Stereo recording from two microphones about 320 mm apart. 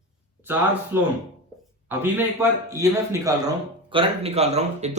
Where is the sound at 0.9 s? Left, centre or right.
Centre.